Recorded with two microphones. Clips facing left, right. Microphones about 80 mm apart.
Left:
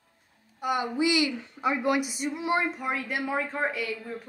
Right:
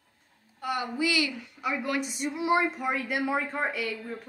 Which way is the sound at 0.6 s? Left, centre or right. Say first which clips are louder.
Left 3 dB; centre.